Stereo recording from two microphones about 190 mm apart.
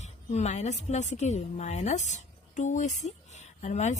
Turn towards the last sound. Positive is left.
turn(degrees=35)  # may be behind; listen again after turning